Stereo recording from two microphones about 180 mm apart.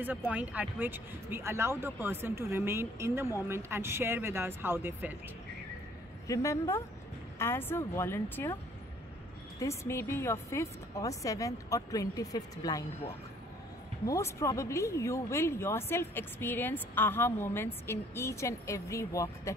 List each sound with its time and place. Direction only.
0.0 s speech: 10° right (ahead or behind)
6.2 s speech: 15° left (ahead or behind)
9.6 s speech: 15° left (ahead or behind)
14.0 s speech: 15° left (ahead or behind)